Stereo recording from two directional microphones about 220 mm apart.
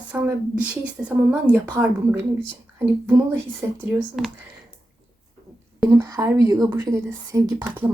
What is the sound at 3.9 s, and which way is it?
Speech, centre (ahead or behind).